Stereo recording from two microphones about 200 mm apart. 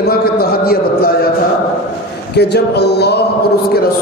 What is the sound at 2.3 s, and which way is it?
Speech, 55° left (ahead or behind).